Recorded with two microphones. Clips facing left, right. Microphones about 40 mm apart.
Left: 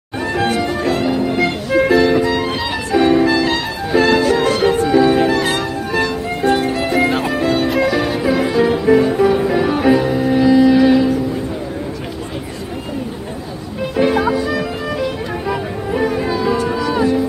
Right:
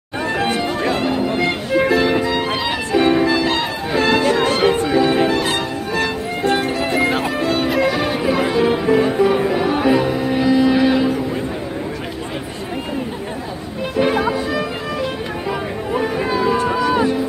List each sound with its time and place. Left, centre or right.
0.2 s music: centre
1.2 s music: centre
4.2 s music: right; by 7.8 s centre
7.8 s music: centre
14.0 s music: centre
15.9 s music: centre